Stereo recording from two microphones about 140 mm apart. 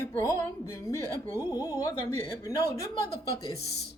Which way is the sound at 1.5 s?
25° left (ahead or behind).